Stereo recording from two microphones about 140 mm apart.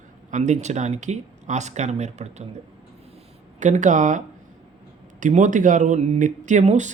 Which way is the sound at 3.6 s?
60° right (ahead or behind).